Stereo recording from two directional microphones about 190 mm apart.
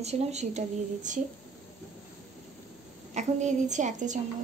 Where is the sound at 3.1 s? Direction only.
40° right (ahead or behind).